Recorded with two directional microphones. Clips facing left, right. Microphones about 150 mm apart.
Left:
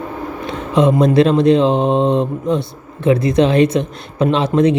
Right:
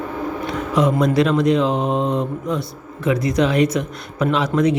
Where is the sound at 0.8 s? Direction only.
25° left (ahead or behind).